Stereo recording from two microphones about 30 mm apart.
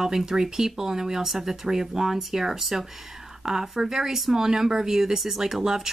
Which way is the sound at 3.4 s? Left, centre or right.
Right.